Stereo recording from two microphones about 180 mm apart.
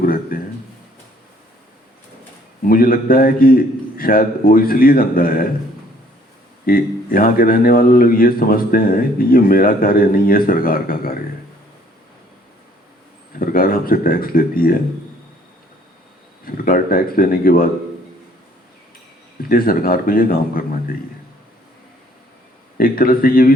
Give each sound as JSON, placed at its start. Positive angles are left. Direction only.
{"t": 0.0, "sound": "a sound", "side_deg": 50}
{"t": 2.6, "sound": "a man's voice", "side_deg": 55}
{"t": 6.7, "sound": "a man's voice", "side_deg": 55}
{"t": 13.4, "sound": "a man's voice", "side_deg": 55}
{"t": 16.5, "sound": "a man's voice", "side_deg": 50}
{"t": 19.4, "sound": "a man's voice", "side_deg": 55}
{"t": 22.8, "sound": "a man's voice", "side_deg": 55}